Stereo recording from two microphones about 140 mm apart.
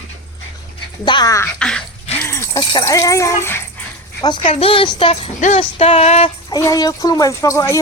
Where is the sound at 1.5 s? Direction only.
5° left (ahead or behind).